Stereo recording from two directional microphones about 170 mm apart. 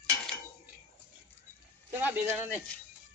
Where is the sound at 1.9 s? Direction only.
10° right (ahead or behind).